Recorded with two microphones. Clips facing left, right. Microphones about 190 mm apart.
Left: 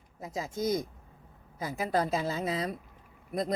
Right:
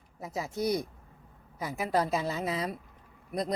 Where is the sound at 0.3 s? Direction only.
20° left (ahead or behind).